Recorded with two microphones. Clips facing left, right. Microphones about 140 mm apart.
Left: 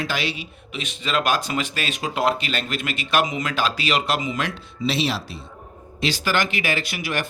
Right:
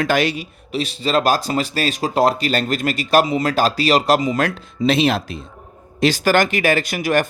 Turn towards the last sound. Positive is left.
turn(degrees=-45)  # may be behind; listen again after turning